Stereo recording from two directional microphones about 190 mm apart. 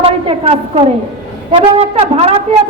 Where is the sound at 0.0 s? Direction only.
30° right (ahead or behind).